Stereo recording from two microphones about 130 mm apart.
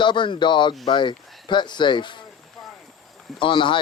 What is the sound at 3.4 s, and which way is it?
Speech, 40° left (ahead or behind).